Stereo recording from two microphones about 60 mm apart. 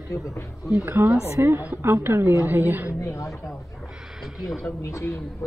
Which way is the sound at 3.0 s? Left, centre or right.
Left.